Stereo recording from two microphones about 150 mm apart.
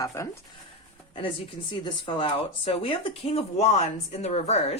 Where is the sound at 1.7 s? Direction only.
35° left (ahead or behind).